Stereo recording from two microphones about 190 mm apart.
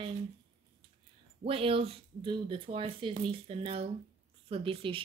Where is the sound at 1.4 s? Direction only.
30° right (ahead or behind).